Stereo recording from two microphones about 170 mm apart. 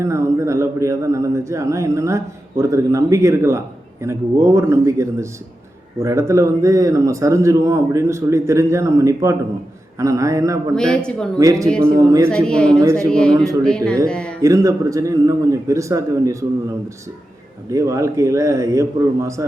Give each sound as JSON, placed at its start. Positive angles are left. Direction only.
{"t": 0.0, "sound": "a man's voice", "side_deg": -15}
{"t": 10.8, "sound": "a man's voice", "side_deg": 5}
{"t": 11.3, "sound": "a man's voice", "side_deg": -20}
{"t": 12.3, "sound": "a man's voice", "side_deg": 5}
{"t": 12.8, "sound": "a man's voice", "side_deg": -20}
{"t": 13.1, "sound": "a man's voice", "side_deg": 5}
{"t": 13.3, "sound": "a man's voice", "side_deg": -20}
{"t": 13.6, "sound": "a man's voice", "side_deg": 5}
{"t": 14.4, "sound": "a man's voice", "side_deg": -20}
{"t": 17.7, "sound": "speech", "side_deg": -20}